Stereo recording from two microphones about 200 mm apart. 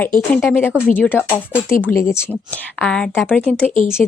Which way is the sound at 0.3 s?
10° left (ahead or behind).